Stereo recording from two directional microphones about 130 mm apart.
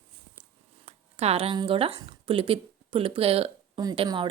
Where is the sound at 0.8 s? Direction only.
55° right (ahead or behind).